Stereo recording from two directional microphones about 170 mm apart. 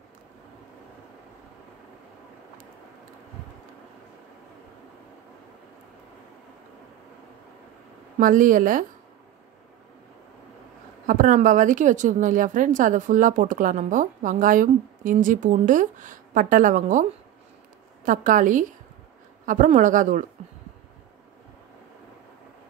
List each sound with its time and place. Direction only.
8.2 s a woman's voice: 55° right (ahead or behind)
11.1 s a woman's voice: 50° right (ahead or behind)
18.0 s a woman's voice: 50° right (ahead or behind)